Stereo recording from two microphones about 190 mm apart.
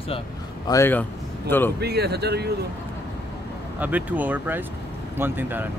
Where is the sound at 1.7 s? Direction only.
60° right (ahead or behind).